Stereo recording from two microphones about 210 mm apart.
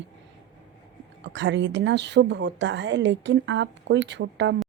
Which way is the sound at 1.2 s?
60° right (ahead or behind).